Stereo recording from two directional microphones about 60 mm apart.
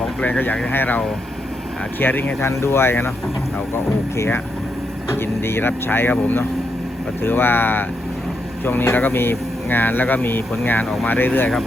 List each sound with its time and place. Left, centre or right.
0.2 s speech: left
2.5 s speech: left
5.0 s speech: left